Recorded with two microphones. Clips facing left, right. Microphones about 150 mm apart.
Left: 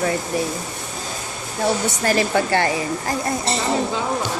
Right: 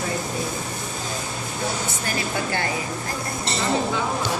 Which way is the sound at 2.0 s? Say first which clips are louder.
Left 9 dB; 85° left.